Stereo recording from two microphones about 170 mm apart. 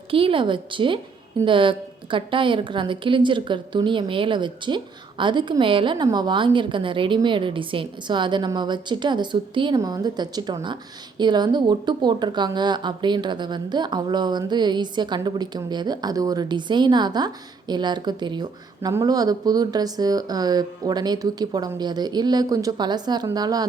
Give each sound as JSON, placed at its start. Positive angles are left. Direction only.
{"t": 0.1, "sound": "speech", "side_deg": -30}